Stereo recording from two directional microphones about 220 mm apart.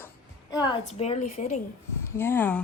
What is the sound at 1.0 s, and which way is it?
Speech, 30° left (ahead or behind).